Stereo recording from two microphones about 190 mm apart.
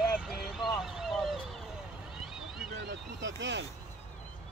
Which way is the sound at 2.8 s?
70° right (ahead or behind).